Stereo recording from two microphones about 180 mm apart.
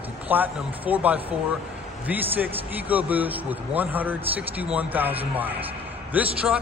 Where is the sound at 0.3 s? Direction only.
10° right (ahead or behind).